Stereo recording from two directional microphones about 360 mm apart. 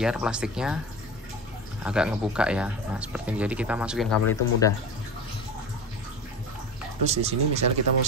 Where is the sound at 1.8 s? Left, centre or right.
Centre.